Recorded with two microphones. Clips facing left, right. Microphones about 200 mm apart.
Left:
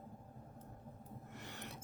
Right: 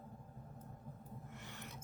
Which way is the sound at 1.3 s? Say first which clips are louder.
Left 2 dB; 40° left (ahead or behind).